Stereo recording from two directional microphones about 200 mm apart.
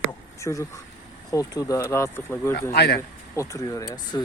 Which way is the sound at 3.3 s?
15° left (ahead or behind).